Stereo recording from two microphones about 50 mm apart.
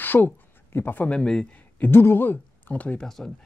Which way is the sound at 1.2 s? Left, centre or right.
Centre.